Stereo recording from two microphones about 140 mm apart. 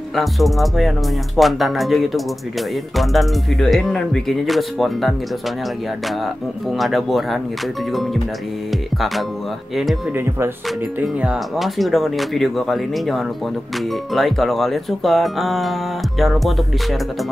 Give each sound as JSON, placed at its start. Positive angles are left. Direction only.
{"t": 0.1, "sound": "speech", "side_deg": 0}
{"t": 8.9, "sound": "music", "side_deg": 0}
{"t": 11.0, "sound": "speech", "side_deg": -10}